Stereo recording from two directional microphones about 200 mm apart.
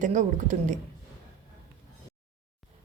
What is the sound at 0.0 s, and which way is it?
Speech, 35° right (ahead or behind).